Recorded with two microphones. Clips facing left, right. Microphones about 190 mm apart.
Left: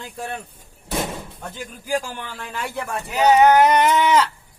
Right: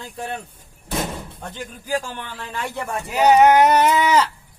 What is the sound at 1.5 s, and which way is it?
A man's voice, 10° left (ahead or behind).